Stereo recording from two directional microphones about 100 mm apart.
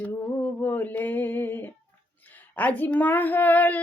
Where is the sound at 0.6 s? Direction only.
20° left (ahead or behind).